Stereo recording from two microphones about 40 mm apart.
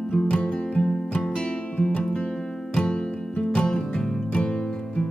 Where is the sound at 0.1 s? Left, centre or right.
Left.